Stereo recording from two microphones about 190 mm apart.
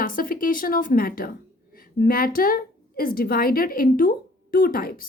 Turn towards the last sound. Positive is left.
turn(degrees=50)  # may be behind; listen again after turning